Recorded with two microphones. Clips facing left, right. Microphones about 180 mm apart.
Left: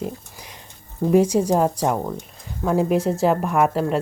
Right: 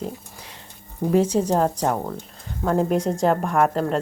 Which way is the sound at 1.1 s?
10° left (ahead or behind).